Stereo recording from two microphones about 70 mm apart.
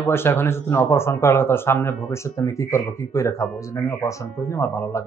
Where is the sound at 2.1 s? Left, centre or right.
Left.